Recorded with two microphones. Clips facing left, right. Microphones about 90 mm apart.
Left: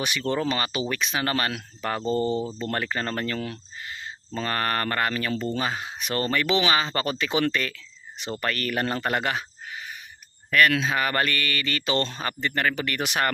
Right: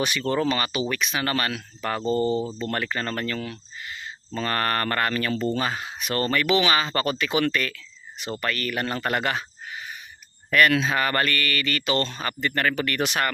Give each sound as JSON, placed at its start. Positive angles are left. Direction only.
{"t": 0.0, "sound": "speech", "side_deg": 15}
{"t": 4.3, "sound": "speech", "side_deg": 15}
{"t": 10.5, "sound": "speech", "side_deg": -5}
{"t": 10.8, "sound": "speech", "side_deg": 10}